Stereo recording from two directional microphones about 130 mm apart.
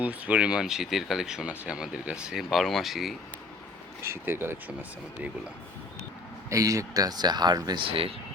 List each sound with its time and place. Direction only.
0.0 s speech: 10° right (ahead or behind)
4.0 s speech: 20° right (ahead or behind)
6.5 s speech: 25° right (ahead or behind)
7.9 s speech: 45° right (ahead or behind)